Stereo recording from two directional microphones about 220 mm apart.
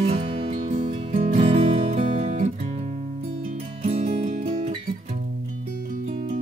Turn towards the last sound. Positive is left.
turn(degrees=-35)  # may be behind; listen again after turning